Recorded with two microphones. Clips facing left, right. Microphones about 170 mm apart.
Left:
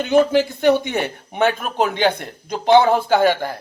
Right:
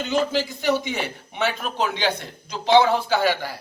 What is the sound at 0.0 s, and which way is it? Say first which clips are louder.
Speech: left 7 dB; 55° left (ahead or behind).